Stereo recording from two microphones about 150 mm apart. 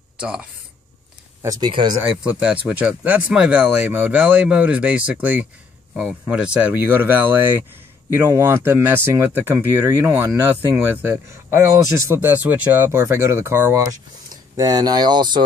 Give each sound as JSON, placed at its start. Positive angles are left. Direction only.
{"t": 0.2, "sound": "speech", "side_deg": -5}
{"t": 1.4, "sound": "speech", "side_deg": -25}
{"t": 2.0, "sound": "speech", "side_deg": -10}